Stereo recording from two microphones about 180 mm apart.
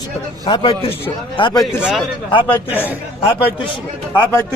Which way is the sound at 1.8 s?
5° right (ahead or behind).